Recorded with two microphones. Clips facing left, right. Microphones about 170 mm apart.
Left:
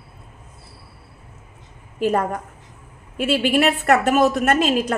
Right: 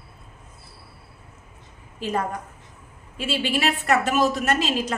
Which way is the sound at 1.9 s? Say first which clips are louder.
Left 6 dB; 55° left (ahead or behind).